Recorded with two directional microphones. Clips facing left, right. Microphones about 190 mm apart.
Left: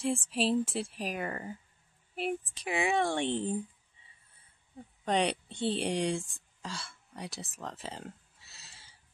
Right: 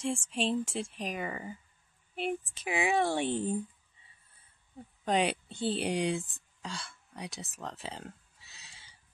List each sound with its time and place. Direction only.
0.0 s speech: centre (ahead or behind)
5.0 s speech: 5° right (ahead or behind)
6.6 s a sound: centre (ahead or behind)